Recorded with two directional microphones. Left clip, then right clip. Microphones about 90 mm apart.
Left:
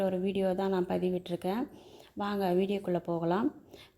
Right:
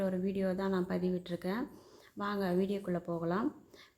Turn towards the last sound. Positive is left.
turn(degrees=35)  # may be behind; listen again after turning